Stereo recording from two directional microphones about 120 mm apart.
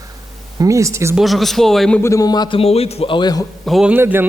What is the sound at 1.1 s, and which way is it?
Speech, centre (ahead or behind).